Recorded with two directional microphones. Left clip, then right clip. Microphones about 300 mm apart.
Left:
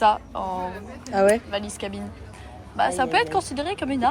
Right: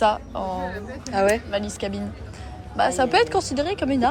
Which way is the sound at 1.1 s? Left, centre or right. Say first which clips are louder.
Left 1 dB; left.